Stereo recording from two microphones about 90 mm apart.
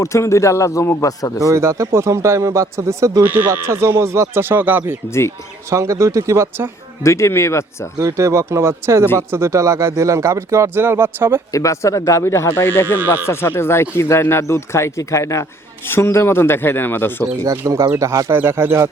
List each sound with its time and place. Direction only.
0.0 s speech: 35° left (ahead or behind)
1.4 s speech: 35° right (ahead or behind)
3.2 s speech: 20° right (ahead or behind)
5.7 s speech: 35° right (ahead or behind)
7.0 s speech: 30° left (ahead or behind)
7.9 s speech: 35° right (ahead or behind)
11.5 s speech: 35° left (ahead or behind)
17.7 s speech: 40° right (ahead or behind)
18.3 s speech: 25° right (ahead or behind)